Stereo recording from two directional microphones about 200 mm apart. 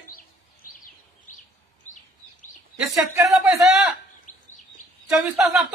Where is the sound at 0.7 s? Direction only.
45° left (ahead or behind).